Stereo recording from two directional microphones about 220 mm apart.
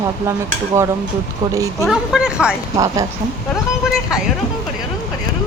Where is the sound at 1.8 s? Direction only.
Centre (ahead or behind).